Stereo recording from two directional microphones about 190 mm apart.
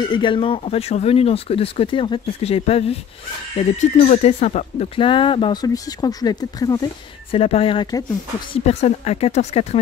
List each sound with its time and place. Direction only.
0.0 s speech: 25° left (ahead or behind)
8.5 s speech: 35° left (ahead or behind)